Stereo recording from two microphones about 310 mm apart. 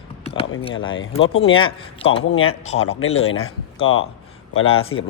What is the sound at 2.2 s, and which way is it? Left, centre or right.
Speech, left.